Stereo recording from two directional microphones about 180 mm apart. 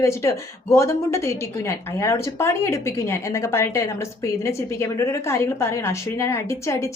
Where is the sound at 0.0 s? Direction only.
15° left (ahead or behind).